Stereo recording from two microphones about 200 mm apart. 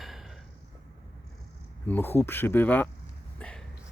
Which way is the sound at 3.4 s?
5° left (ahead or behind).